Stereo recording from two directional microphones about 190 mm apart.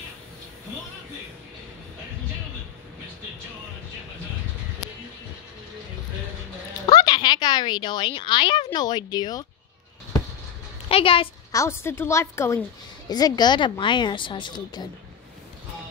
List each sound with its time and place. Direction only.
6.9 s a sound: 25° left (ahead or behind)
8.7 s a woman's voice: 20° left (ahead or behind)
10.9 s a woman's voice: 30° left (ahead or behind)
11.5 s a woman's voice: 15° left (ahead or behind)